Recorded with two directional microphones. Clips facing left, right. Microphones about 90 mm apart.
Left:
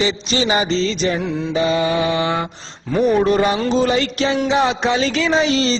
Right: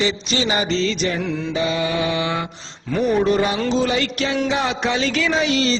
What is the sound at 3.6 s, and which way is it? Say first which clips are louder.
Music: left 3 dB; 40° left (ahead or behind).